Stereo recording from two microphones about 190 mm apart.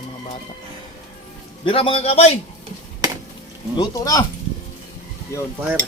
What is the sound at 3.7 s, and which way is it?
Speech, 20° left (ahead or behind).